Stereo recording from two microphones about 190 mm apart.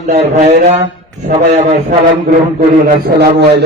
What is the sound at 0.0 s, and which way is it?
Speech, 40° right (ahead or behind).